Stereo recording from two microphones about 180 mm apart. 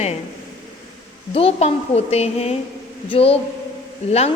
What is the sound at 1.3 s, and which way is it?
A woman's voice, 35° left (ahead or behind).